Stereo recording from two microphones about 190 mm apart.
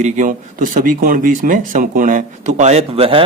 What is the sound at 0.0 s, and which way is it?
Speech, 45° right (ahead or behind).